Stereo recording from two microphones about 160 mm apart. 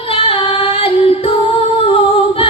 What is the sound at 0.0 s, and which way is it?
Female singing, 35° left (ahead or behind).